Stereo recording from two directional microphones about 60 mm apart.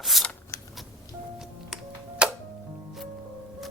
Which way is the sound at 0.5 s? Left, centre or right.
Left.